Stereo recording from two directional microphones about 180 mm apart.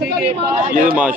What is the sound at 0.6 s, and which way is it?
Speech, 50° right (ahead or behind).